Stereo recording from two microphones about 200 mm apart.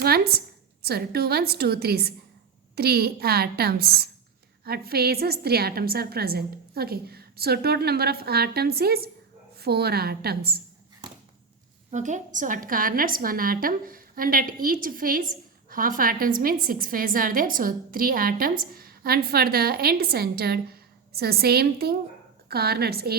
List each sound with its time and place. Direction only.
0.0 s a woman's voice: 50° right (ahead or behind)
11.9 s a woman's voice: 35° right (ahead or behind)